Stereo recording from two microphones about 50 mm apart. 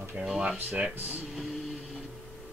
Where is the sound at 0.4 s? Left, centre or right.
Right.